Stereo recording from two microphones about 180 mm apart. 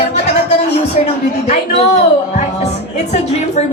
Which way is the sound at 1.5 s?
40° left (ahead or behind).